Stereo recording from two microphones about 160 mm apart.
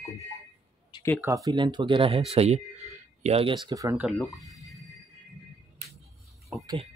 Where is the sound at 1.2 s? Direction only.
20° right (ahead or behind).